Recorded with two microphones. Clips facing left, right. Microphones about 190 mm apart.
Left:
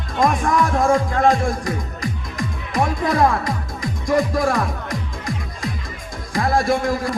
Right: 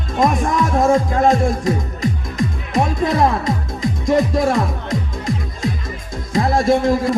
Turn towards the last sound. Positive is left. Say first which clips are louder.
# right 5 dB
turn(degrees=-25)  # may be behind; listen again after turning